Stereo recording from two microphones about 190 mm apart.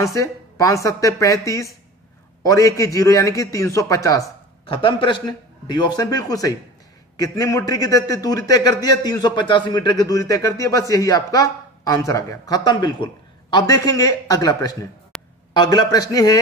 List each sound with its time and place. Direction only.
0.0 s a man's voice: 15° left (ahead or behind)
15.1 s a sound: 5° left (ahead or behind)
15.5 s a man's voice: 20° left (ahead or behind)